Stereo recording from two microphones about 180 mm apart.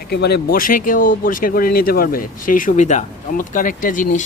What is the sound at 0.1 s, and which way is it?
Speech, 65° left (ahead or behind).